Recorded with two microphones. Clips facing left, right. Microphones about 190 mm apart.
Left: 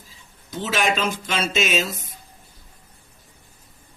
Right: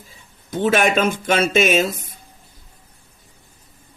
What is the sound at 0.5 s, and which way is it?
Speech, 55° right (ahead or behind).